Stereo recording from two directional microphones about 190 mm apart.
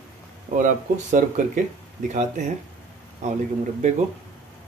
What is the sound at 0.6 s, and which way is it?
Speech, 40° right (ahead or behind).